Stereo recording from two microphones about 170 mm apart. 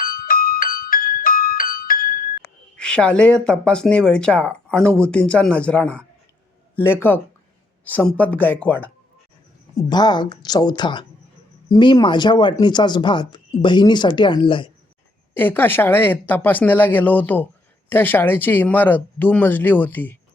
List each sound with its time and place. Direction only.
0.0 s music: 55° left (ahead or behind)
2.4 s speech: 5° left (ahead or behind)
9.7 s speech: 25° left (ahead or behind)
15.4 s speech: 10° left (ahead or behind)